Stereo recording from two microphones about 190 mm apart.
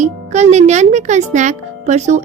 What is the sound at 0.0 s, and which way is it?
A child's voice, 35° right (ahead or behind).